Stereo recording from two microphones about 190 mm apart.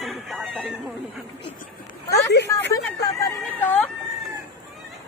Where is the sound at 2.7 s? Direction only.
15° left (ahead or behind).